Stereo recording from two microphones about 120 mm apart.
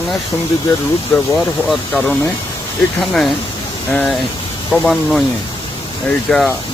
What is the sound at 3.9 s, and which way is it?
Speech, 10° left (ahead or behind).